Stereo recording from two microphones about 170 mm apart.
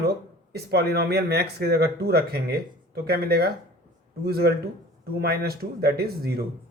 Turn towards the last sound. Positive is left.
turn(degrees=-65)  # may be behind; listen again after turning